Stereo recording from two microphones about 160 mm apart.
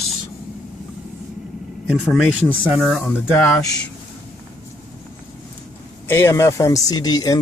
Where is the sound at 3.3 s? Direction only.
10° left (ahead or behind).